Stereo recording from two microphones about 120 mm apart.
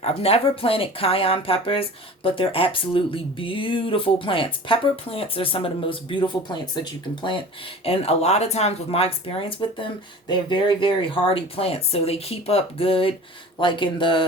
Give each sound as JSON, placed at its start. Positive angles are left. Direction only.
{"t": 0.0, "sound": "speech", "side_deg": 55}
{"t": 7.9, "sound": "speech", "side_deg": 55}